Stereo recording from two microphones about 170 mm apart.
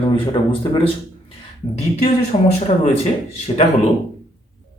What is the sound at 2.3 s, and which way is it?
Speech, 40° left (ahead or behind).